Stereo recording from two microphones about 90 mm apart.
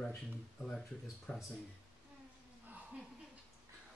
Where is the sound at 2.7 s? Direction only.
15° right (ahead or behind).